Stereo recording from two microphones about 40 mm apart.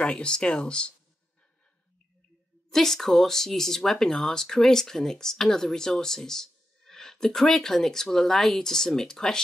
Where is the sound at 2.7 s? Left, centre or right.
Centre.